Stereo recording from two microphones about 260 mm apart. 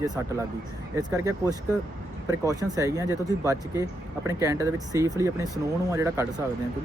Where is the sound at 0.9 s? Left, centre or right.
Centre.